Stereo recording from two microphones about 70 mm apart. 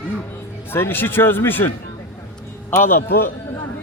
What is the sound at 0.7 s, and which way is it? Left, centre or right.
Speech, left.